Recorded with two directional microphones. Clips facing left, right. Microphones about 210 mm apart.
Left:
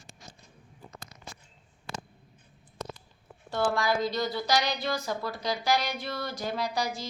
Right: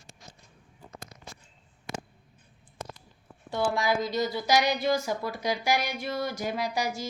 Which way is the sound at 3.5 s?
20° right (ahead or behind).